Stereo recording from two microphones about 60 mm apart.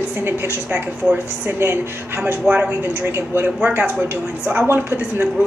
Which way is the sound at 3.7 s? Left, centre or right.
Right.